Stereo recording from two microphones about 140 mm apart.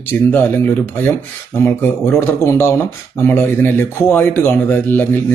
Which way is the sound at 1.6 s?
15° left (ahead or behind).